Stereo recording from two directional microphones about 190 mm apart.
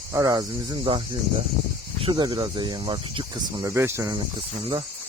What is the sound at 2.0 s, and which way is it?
Speech, 25° right (ahead or behind).